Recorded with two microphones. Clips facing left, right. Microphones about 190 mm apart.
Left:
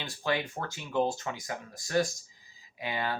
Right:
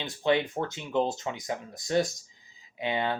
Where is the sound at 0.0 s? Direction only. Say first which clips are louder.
Right 6 dB; 20° right (ahead or behind).